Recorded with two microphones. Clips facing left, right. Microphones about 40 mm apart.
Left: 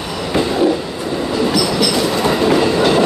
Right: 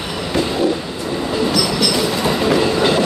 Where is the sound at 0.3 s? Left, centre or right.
Centre.